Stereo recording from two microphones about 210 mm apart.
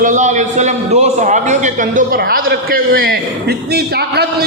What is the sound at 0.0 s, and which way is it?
A man's voice, 35° right (ahead or behind).